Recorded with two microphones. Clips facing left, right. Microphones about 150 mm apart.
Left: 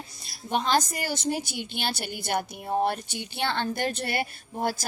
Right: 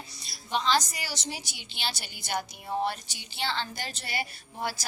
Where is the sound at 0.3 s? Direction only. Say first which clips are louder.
Left 2 dB; 50° left (ahead or behind).